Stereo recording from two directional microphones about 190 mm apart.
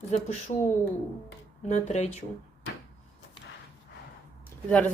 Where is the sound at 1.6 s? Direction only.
35° left (ahead or behind).